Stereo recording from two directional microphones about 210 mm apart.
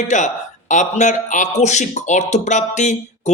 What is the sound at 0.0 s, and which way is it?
Speech, 35° left (ahead or behind).